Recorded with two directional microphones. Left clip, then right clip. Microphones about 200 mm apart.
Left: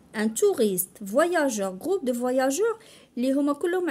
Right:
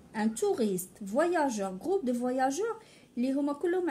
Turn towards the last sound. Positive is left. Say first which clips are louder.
# left 5 dB
turn(degrees=45)  # may be behind; listen again after turning